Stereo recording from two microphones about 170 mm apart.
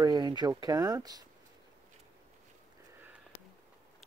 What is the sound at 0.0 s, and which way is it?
Speech, 25° right (ahead or behind).